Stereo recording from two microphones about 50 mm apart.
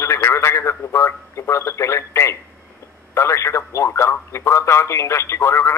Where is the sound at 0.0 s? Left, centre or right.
Left.